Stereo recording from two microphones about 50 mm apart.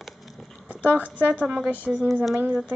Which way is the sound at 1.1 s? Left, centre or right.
Right.